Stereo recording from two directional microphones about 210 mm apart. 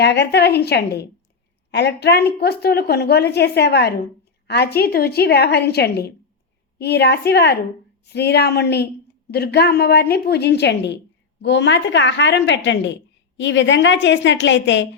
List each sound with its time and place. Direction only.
0.0 s a woman's voice: 50° left (ahead or behind)